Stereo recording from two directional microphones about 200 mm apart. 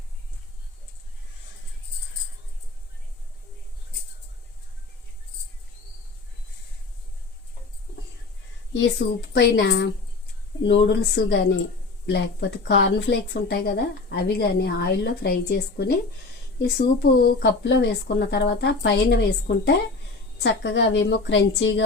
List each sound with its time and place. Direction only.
8.7 s speech: 60° left (ahead or behind)